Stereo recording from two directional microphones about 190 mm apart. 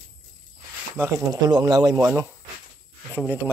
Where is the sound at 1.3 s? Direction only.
20° right (ahead or behind).